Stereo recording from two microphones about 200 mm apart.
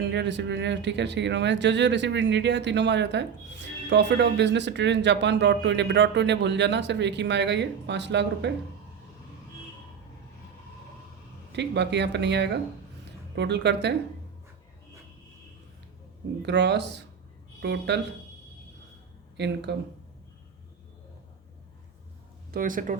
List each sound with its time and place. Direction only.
0.1 s speech: 60° right (ahead or behind)
11.5 s speech: 60° right (ahead or behind)
16.4 s speech: 60° right (ahead or behind)
19.4 s speech: 60° right (ahead or behind)
22.5 s speech: 40° right (ahead or behind)